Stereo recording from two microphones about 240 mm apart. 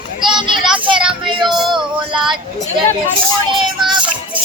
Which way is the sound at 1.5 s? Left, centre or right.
Centre.